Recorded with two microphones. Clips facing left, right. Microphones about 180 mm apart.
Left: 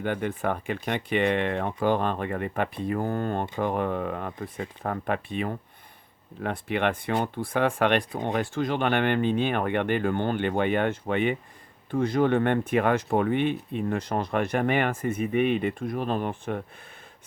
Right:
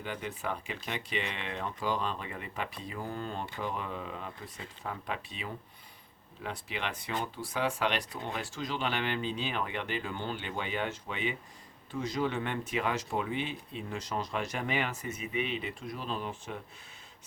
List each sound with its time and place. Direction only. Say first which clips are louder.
0.0 s speech: left 10 dB; 55° left (ahead or behind)